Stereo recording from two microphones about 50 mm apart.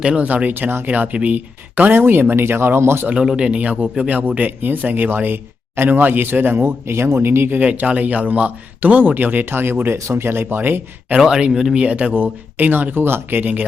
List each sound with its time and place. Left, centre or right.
0.2 s speech: right
0.5 s speech: right
0.9 s speech: right
1.9 s speech: right
3.2 s speech: centre; by 7.6 s right
7.6 s speech: right
11.3 s speech: centre
11.8 s speech: right